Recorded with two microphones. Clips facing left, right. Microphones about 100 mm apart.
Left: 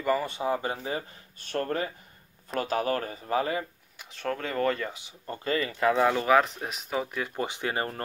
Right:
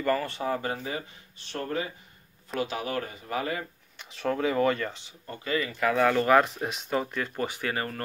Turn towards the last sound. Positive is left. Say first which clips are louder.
# left 1 dB
turn(degrees=25)  # may be behind; listen again after turning